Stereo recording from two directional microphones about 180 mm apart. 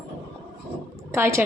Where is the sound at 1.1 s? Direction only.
15° right (ahead or behind).